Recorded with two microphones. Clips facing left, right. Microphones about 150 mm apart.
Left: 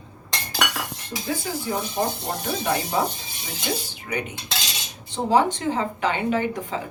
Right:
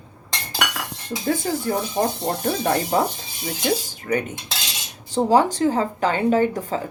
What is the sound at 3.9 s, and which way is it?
Dishes, 45° right (ahead or behind).